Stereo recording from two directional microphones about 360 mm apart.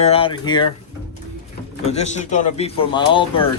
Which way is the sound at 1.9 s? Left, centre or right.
Centre.